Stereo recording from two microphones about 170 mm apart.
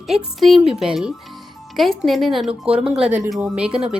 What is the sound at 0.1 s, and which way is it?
Speech, centre (ahead or behind).